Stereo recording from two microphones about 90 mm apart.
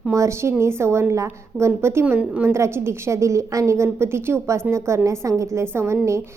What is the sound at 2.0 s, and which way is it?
Speech, 15° right (ahead or behind).